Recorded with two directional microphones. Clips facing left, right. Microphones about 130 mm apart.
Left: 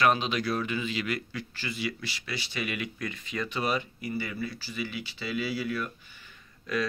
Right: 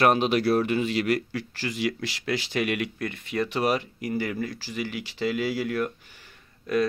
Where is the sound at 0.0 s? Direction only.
55° right (ahead or behind); by 5.9 s 80° right.